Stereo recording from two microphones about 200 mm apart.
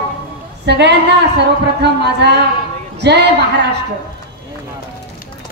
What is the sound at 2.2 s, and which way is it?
A woman's voice, 55° right (ahead or behind).